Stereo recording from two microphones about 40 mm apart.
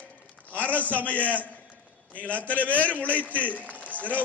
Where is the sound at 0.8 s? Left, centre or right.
Left.